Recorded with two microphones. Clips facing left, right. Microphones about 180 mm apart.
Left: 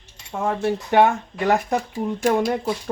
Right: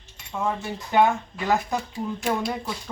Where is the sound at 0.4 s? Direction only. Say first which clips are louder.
Left 6 dB; 65° left (ahead or behind).